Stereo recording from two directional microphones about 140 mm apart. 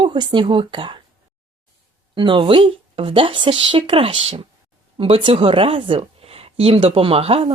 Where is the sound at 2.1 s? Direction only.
35° right (ahead or behind).